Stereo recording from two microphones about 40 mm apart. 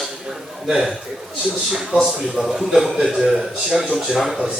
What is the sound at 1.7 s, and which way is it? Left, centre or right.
A man's voice, centre.